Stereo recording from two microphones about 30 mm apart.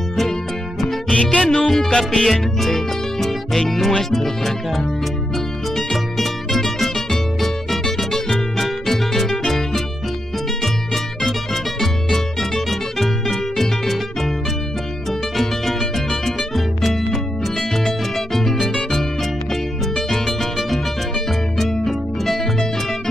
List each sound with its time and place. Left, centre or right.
0.7 s music: centre
1.1 s music: left
1.5 s speech: centre
1.9 s music: left
2.6 s music: centre
4.1 s speech: centre
5.8 s music: centre
11.2 s music: centre
15.3 s music: centre
20.1 s music: centre